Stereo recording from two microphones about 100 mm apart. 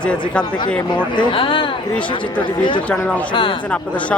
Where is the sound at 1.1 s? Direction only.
55° left (ahead or behind).